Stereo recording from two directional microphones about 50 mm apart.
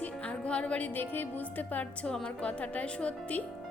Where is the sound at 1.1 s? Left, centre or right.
Left.